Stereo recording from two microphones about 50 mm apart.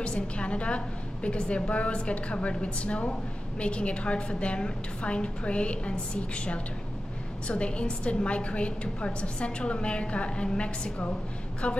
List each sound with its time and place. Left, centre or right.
0.0 s a woman's voice: left